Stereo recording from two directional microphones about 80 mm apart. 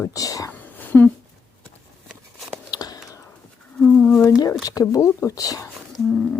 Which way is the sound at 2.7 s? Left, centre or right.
Left.